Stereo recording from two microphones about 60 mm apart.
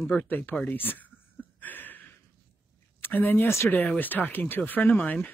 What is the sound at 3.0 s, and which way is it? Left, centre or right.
Speech, left.